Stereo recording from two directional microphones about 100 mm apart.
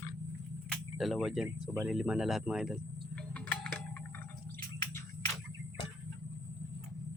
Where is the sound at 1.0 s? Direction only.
5° right (ahead or behind).